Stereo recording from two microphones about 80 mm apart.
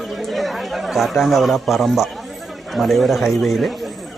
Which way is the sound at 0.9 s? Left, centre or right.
Centre.